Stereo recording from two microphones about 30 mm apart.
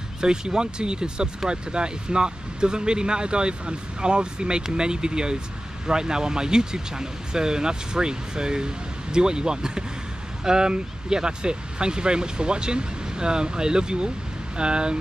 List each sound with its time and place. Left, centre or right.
0.2 s speech: right